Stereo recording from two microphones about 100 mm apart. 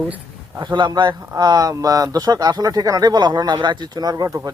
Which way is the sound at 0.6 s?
50° right (ahead or behind).